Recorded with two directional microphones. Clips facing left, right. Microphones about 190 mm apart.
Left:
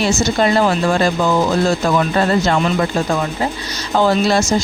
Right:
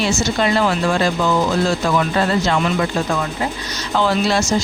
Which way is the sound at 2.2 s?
45° left (ahead or behind).